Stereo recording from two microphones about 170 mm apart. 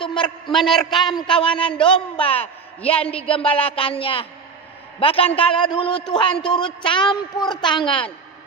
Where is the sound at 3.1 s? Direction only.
35° left (ahead or behind).